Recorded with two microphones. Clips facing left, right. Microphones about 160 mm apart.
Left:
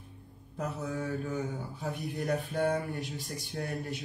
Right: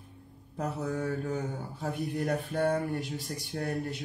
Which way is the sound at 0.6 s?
50° right (ahead or behind).